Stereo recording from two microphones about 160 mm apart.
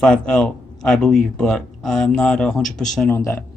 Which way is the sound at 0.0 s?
5° left (ahead or behind).